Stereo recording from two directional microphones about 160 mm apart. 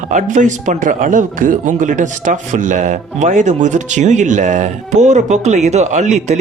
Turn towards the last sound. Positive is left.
turn(degrees=-45)  # may be behind; listen again after turning